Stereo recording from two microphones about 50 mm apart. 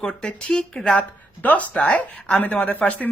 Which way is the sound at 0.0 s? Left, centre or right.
Centre.